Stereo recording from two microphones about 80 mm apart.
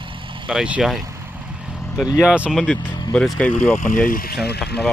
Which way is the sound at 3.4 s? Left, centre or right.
Left.